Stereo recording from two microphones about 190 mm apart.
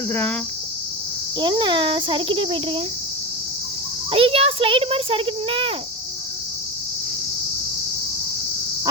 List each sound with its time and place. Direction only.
0.1 s speech: 10° left (ahead or behind)
1.4 s a child's voice: 25° right (ahead or behind)
4.1 s a child's voice: 30° right (ahead or behind)